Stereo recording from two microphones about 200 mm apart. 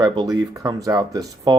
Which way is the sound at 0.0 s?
20° right (ahead or behind).